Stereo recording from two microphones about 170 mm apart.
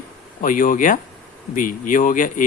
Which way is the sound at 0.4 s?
50° left (ahead or behind).